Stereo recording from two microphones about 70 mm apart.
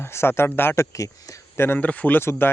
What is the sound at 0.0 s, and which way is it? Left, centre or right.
Speech, left.